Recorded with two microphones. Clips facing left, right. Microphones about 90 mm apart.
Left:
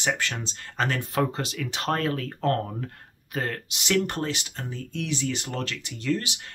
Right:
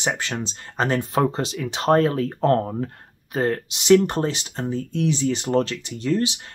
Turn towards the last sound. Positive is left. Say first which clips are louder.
# right 5 dB
turn(degrees=-25)  # may be behind; listen again after turning